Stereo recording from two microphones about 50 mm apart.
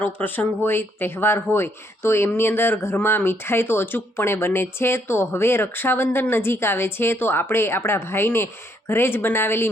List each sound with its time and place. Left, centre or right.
0.0 s speech: left